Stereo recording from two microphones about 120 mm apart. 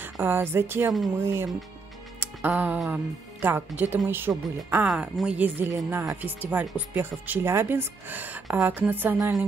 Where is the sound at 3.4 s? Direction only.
15° right (ahead or behind).